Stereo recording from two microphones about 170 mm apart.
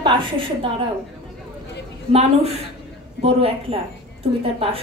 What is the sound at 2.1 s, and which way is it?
A woman's voice, 35° right (ahead or behind).